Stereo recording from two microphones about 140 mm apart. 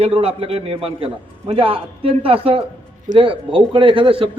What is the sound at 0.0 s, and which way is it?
A man's voice, 45° right (ahead or behind).